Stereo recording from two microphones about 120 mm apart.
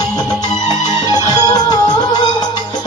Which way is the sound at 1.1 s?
35° left (ahead or behind).